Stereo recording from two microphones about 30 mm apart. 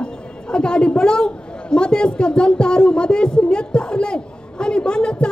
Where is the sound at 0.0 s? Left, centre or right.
Left.